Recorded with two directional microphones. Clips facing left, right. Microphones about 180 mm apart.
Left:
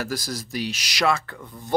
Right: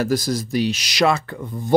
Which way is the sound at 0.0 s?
20° right (ahead or behind).